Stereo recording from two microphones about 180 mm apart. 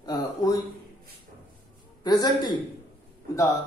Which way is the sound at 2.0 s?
20° left (ahead or behind).